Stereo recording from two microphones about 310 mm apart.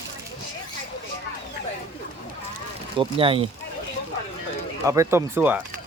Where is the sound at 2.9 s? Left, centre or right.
Centre.